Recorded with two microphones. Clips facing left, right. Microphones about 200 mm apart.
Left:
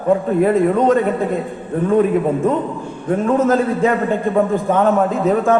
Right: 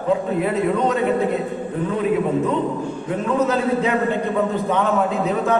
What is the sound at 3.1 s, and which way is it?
A man's voice, 45° left (ahead or behind).